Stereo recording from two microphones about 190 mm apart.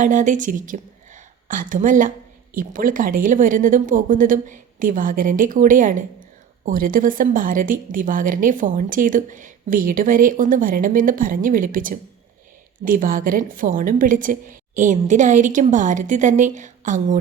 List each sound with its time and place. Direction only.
0.0 s a woman's voice: 40° right (ahead or behind)